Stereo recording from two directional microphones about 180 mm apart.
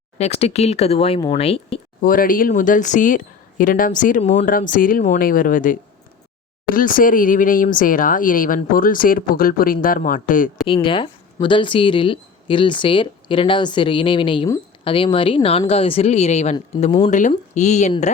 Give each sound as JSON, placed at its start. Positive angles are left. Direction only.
{"t": 0.2, "sound": "speech", "side_deg": 35}
{"t": 2.0, "sound": "speech", "side_deg": 50}
{"t": 10.7, "sound": "speech", "side_deg": 30}